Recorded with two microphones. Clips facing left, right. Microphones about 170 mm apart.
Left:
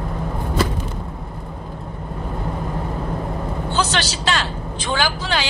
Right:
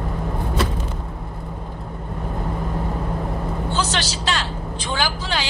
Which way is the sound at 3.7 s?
70° left (ahead or behind).